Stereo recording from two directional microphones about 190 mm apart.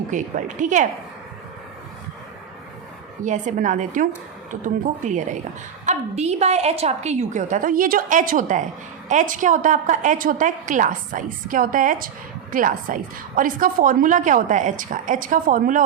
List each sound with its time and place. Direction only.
0.1 s a woman's voice: 40° right (ahead or behind)
3.2 s a woman's voice: 40° right (ahead or behind)